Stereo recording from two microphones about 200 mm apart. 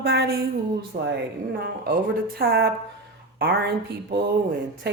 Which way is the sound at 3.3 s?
55° right (ahead or behind).